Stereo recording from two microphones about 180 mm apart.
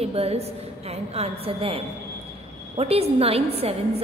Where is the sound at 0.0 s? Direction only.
35° right (ahead or behind).